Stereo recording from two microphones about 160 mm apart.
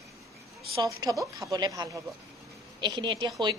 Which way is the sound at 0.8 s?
20° right (ahead or behind).